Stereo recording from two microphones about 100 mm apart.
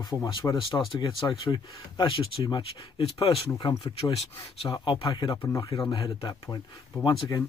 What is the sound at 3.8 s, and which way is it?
Speech, 75° left (ahead or behind).